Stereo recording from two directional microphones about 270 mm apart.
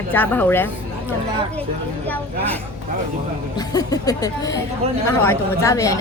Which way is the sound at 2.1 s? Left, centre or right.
Centre.